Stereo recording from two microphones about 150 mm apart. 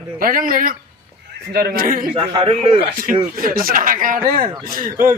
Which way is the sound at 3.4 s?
70° right (ahead or behind).